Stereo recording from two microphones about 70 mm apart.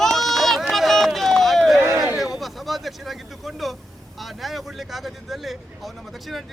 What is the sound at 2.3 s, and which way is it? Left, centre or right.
Speech, centre.